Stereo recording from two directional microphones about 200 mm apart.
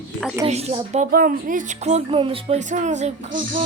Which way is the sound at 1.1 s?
45° right (ahead or behind).